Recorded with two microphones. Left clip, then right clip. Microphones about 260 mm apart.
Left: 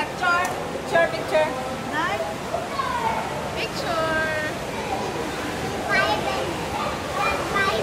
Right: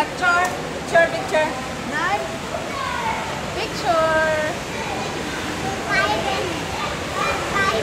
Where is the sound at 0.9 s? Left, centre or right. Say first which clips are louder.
Right 4 dB; centre.